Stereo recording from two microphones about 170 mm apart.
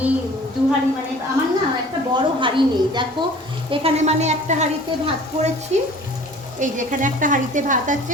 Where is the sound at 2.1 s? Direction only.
30° right (ahead or behind); by 7.9 s 50° right (ahead or behind).